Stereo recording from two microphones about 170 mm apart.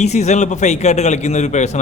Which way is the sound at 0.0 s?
40° left (ahead or behind).